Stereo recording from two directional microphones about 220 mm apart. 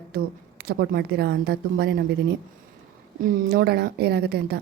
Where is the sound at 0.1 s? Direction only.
45° right (ahead or behind).